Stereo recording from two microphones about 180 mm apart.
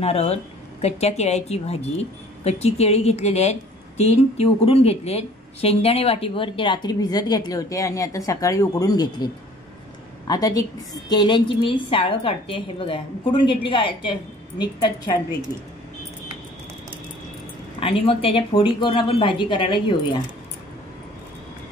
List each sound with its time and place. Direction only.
0.0 s a woman's voice: 35° left (ahead or behind)
17.7 s a woman's voice: 30° left (ahead or behind)